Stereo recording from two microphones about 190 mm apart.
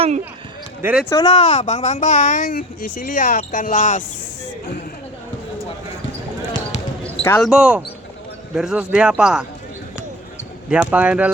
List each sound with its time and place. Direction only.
0.8 s speech: 10° right (ahead or behind)
1.1 s a woman's voice: 25° left (ahead or behind); by 4.0 s 40° left (ahead or behind)
7.0 s basketball bounce: 10° left (ahead or behind)
7.4 s speech: 5° right (ahead or behind)
10.7 s speech: 5° right (ahead or behind)